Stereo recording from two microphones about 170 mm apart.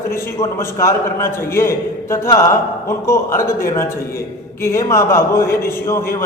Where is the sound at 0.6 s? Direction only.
15° left (ahead or behind).